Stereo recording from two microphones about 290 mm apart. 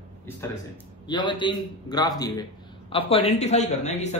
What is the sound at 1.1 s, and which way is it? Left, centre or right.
A man's voice, centre.